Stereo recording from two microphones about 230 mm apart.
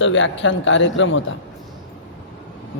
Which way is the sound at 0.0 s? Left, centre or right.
Left.